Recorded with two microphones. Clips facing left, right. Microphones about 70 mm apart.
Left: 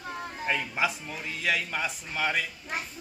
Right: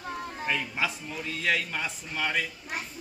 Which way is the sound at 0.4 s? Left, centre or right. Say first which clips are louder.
Left 2 dB; left.